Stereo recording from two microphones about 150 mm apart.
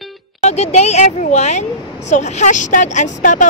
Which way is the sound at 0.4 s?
45° left (ahead or behind).